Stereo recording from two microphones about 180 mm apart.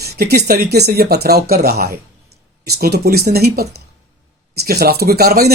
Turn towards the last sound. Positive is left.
turn(degrees=-60)  # may be behind; listen again after turning